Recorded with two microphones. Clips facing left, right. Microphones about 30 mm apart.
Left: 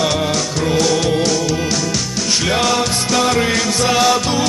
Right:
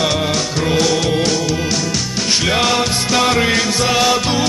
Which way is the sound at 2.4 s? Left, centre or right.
Centre.